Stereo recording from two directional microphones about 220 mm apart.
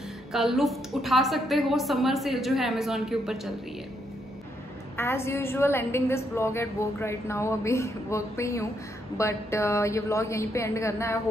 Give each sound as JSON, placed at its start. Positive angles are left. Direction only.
{"t": 0.3, "sound": "a woman's voice", "side_deg": 0}
{"t": 4.9, "sound": "a woman's voice", "side_deg": 10}